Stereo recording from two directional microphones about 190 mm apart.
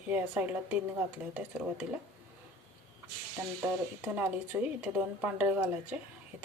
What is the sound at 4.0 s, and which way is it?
Speech, 10° right (ahead or behind).